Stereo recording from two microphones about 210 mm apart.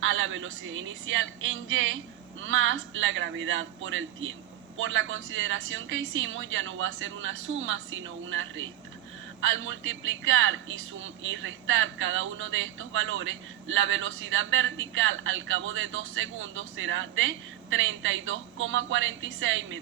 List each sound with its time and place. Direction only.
0.0 s speech: 65° right (ahead or behind)